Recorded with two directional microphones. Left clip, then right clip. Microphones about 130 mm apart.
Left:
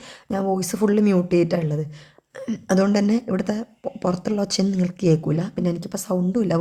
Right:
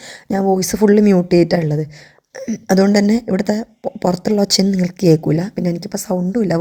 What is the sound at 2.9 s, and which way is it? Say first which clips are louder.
A woman's voice: right 6 dB; 30° right (ahead or behind).